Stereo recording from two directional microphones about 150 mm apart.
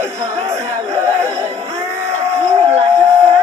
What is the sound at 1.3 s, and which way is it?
Music, 45° right (ahead or behind).